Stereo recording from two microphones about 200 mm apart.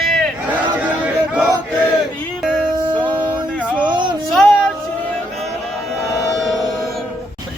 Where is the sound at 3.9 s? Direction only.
25° right (ahead or behind).